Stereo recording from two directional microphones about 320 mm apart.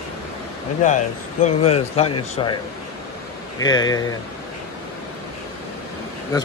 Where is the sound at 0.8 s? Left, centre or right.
Left.